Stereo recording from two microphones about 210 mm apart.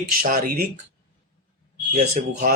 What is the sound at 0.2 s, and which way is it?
Speech, 45° right (ahead or behind).